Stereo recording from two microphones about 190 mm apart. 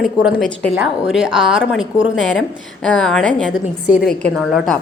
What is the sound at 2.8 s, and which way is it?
A woman's voice, 5° left (ahead or behind).